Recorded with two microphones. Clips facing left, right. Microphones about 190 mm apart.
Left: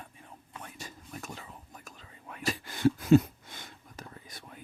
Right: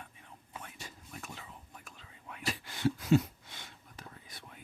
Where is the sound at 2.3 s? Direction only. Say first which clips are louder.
Left 5 dB; 45° left (ahead or behind).